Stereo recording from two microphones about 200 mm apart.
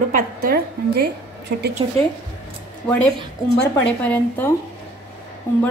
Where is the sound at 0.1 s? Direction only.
50° right (ahead or behind).